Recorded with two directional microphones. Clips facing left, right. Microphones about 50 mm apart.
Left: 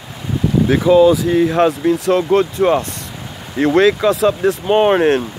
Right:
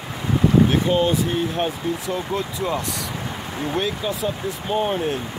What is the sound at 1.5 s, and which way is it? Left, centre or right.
Speech, left.